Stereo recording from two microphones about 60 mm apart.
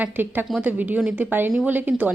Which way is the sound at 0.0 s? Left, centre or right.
Right.